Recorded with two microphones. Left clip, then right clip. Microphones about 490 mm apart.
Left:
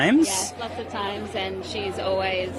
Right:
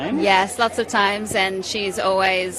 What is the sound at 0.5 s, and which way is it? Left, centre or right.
A woman's voice, right.